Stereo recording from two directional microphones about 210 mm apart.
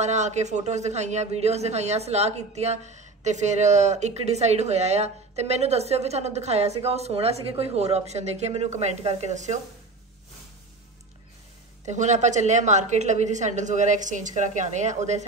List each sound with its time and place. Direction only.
0.0 s a man's voice: 35° right (ahead or behind)
11.8 s a man's voice: 35° right (ahead or behind)